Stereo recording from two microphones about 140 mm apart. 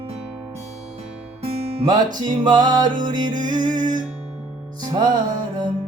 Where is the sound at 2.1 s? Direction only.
30° right (ahead or behind).